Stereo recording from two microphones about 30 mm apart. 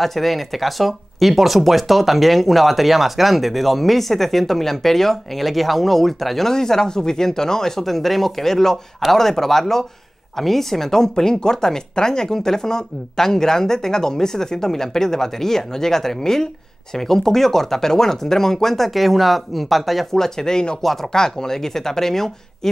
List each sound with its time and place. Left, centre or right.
0.0 s speech: centre
6.5 s speech: centre
18.9 s speech: centre
20.1 s speech: centre
20.8 s speech: centre
21.1 s speech: centre